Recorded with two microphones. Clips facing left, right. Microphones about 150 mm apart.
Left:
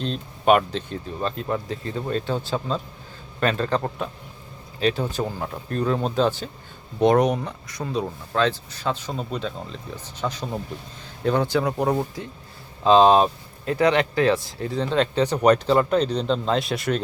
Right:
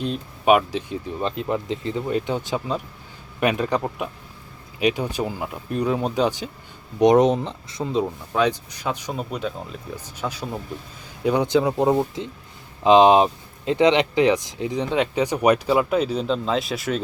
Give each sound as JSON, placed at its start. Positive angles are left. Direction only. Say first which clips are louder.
{"t": 0.0, "sound": "speech", "louder": "even", "side_deg": -10}
{"t": 8.3, "sound": "speech", "louder": "left 2 dB", "side_deg": -15}